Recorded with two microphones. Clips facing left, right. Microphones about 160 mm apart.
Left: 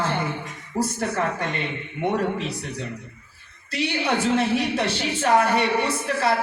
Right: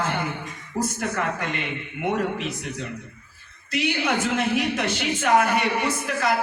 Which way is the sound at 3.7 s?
35° left (ahead or behind).